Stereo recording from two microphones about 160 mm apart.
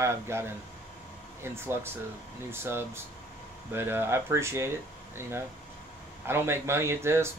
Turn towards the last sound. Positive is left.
turn(degrees=-15)  # may be behind; listen again after turning